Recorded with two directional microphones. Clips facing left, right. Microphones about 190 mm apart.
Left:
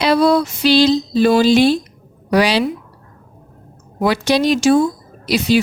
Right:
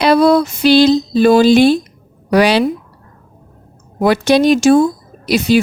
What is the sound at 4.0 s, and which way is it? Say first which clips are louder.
A woman's voice: right 4 dB; 55° right (ahead or behind).